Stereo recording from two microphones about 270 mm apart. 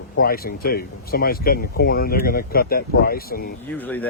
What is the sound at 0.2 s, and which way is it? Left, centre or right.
Speech, left.